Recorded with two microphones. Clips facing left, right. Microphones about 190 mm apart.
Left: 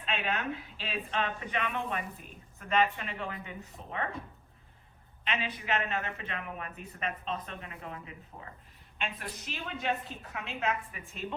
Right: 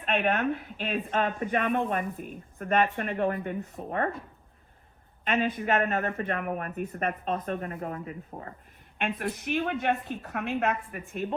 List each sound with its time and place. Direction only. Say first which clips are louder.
0.0 s speech: right 8 dB; 55° right (ahead or behind)
5.2 s a woman's voice: right 9 dB; 50° right (ahead or behind)